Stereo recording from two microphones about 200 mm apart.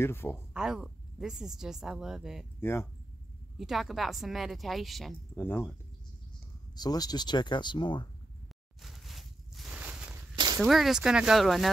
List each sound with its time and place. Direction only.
0.0 s speech: 10° left (ahead or behind)
0.5 s a woman's voice: 5° right (ahead or behind)
2.6 s speech: 10° left (ahead or behind)
3.5 s a woman's voice: centre (ahead or behind)
5.3 s speech: 10° left (ahead or behind)
8.8 s a sound: centre (ahead or behind)
10.3 s a sound: 20° right (ahead or behind)
10.6 s a woman's voice: centre (ahead or behind)